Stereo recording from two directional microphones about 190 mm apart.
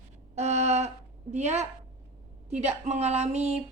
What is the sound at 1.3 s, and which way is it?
Speech, 35° right (ahead or behind).